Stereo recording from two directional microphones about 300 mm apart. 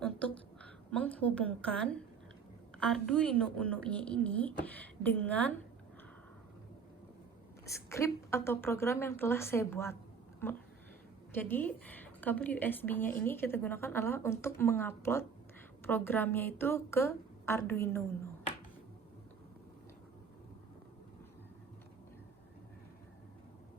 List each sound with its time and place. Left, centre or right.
0.0 s a sound: centre
2.7 s a woman's voice: centre
7.6 s a woman's voice: centre